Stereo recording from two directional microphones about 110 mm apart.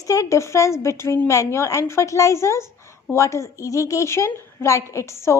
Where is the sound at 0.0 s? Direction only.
30° left (ahead or behind).